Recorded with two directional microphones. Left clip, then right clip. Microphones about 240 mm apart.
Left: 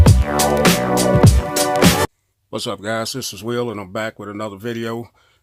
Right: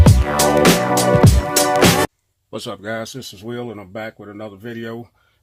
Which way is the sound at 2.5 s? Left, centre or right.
Left.